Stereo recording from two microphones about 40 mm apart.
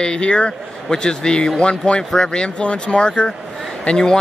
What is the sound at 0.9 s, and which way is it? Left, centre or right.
Speech, centre.